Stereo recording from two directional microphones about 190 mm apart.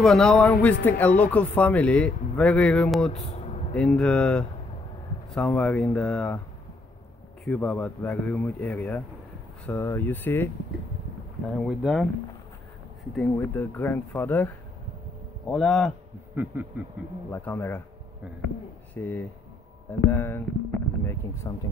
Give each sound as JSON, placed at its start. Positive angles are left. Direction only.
{"t": 0.0, "sound": "speech", "side_deg": 5}
{"t": 3.1, "sound": "a sound", "side_deg": 35}
{"t": 3.7, "sound": "speech", "side_deg": 5}
{"t": 7.4, "sound": "speech", "side_deg": 5}
{"t": 13.1, "sound": "speech", "side_deg": 10}
{"t": 16.3, "sound": "a sound", "side_deg": -10}
{"t": 17.3, "sound": "speech", "side_deg": 10}
{"t": 18.9, "sound": "speech", "side_deg": 10}